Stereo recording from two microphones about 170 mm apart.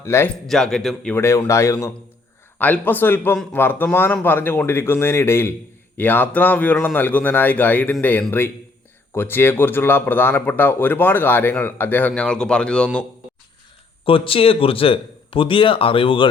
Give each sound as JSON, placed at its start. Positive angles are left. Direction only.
{"t": 0.0, "sound": "speech", "side_deg": 15}
{"t": 0.4, "sound": "speech", "side_deg": 0}
{"t": 1.1, "sound": "speech", "side_deg": 15}
{"t": 14.0, "sound": "a man's voice", "side_deg": 30}